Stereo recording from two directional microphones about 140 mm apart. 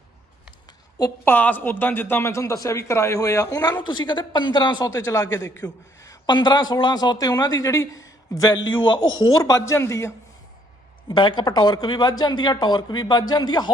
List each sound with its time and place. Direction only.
0.9 s a man's voice: 25° left (ahead or behind)
1.3 s a man's voice: 10° left (ahead or behind)
11.1 s speech: 35° left (ahead or behind)